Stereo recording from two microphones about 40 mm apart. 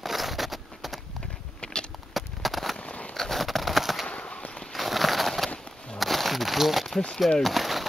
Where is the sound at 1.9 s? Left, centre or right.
Centre.